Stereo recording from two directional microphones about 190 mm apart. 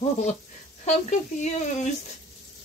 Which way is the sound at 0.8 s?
40° left (ahead or behind).